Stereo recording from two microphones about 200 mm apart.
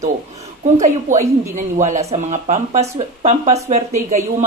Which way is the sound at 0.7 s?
40° right (ahead or behind).